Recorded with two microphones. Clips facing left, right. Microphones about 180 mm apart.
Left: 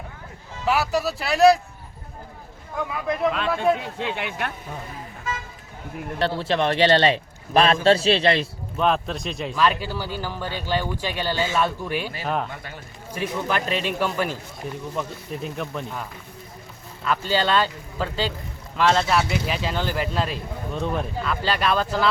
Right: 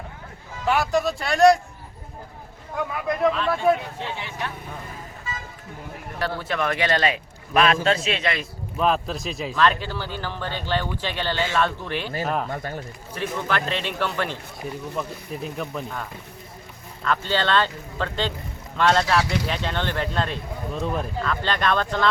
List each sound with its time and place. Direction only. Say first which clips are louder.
0.6 s speech: right 1 dB; 5° left (ahead or behind)
4.1 s speech: left 3 dB; 65° left (ahead or behind)
6.1 s a man's voice: left 4 dB; 25° left (ahead or behind)
8.8 s speech: even; centre (ahead or behind)
12.2 s speech: right 2 dB; centre (ahead or behind)
12.5 s speech: right 7 dB; 45° right (ahead or behind)
13.1 s speech: left 1 dB; 10° left (ahead or behind)
14.6 s speech: even; centre (ahead or behind)